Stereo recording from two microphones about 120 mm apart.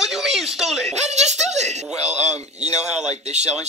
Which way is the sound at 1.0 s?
70° right (ahead or behind).